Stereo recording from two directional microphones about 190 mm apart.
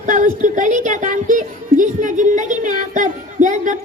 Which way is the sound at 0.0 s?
40° right (ahead or behind).